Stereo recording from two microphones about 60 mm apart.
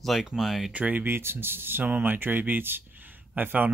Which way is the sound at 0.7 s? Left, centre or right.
Right.